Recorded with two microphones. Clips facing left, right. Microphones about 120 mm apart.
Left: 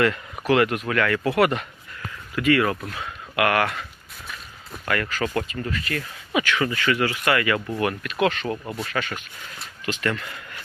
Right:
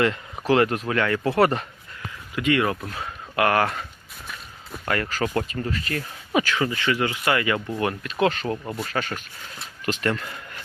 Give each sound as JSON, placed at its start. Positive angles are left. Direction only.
{"t": 0.0, "sound": "speech", "side_deg": -30}
{"t": 2.3, "sound": "speech", "side_deg": -20}
{"t": 4.9, "sound": "speech", "side_deg": -35}
{"t": 5.2, "sound": "speech", "side_deg": -20}
{"t": 5.5, "sound": "speech", "side_deg": -35}
{"t": 8.6, "sound": "speech", "side_deg": 0}
{"t": 8.9, "sound": "speech", "side_deg": -40}